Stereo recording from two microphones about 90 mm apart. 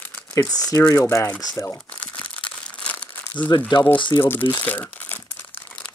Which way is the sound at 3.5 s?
60° left (ahead or behind).